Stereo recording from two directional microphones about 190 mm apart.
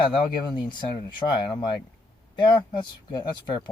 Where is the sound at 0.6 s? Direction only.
25° left (ahead or behind).